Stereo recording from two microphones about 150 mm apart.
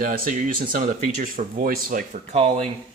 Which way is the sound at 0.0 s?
60° right (ahead or behind).